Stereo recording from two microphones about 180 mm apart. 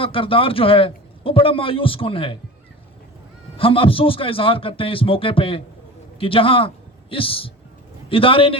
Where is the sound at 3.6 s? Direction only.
30° left (ahead or behind).